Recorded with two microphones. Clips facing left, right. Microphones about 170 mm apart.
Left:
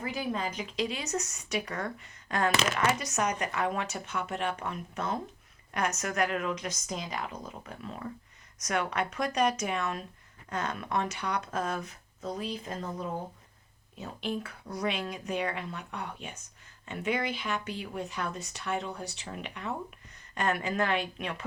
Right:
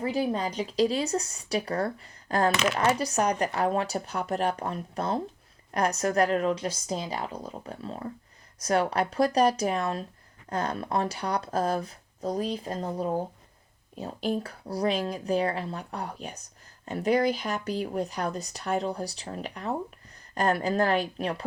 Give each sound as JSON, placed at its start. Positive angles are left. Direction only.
{"t": 0.0, "sound": "speech", "side_deg": -35}